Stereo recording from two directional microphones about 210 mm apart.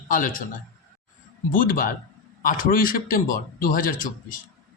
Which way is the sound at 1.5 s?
40° left (ahead or behind).